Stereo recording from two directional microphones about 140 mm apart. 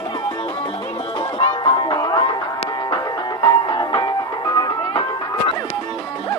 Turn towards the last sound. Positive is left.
turn(degrees=30)  # may be behind; listen again after turning